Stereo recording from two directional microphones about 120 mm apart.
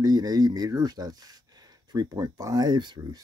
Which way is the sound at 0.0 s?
30° right (ahead or behind).